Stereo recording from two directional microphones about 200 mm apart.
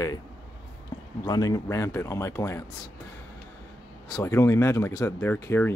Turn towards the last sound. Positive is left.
turn(degrees=10)  # may be behind; listen again after turning